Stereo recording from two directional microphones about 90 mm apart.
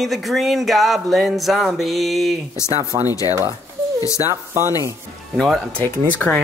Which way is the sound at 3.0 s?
45° left (ahead or behind).